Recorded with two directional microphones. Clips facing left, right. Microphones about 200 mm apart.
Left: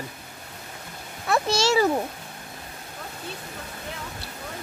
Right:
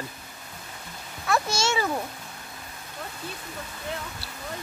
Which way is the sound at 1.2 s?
35° left (ahead or behind).